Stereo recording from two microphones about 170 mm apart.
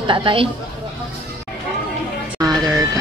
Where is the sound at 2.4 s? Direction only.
20° right (ahead or behind).